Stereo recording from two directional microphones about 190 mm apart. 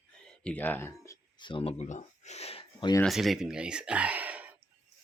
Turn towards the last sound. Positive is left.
turn(degrees=-10)  # may be behind; listen again after turning